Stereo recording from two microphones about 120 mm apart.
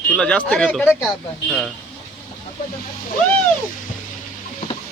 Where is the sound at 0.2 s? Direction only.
10° left (ahead or behind).